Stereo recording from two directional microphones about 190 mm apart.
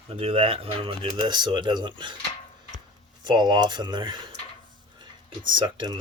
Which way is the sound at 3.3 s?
20° right (ahead or behind).